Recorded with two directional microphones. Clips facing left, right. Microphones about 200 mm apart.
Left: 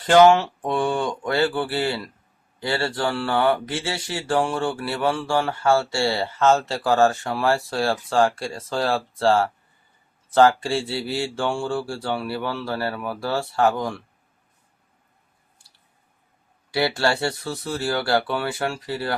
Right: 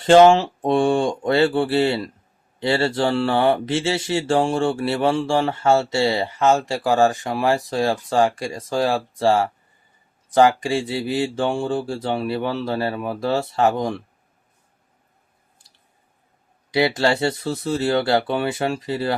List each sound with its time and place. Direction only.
0.0 s speech: 25° right (ahead or behind)
16.7 s speech: 20° right (ahead or behind)